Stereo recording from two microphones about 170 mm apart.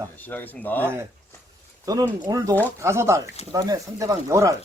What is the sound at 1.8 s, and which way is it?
Speech, 20° right (ahead or behind).